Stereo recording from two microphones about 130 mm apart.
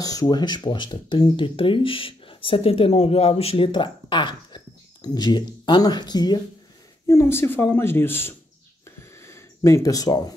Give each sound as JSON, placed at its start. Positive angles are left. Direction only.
{"t": 0.0, "sound": "speech", "side_deg": 30}
{"t": 7.1, "sound": "a woman's voice", "side_deg": 20}
{"t": 8.8, "sound": "a sound", "side_deg": 20}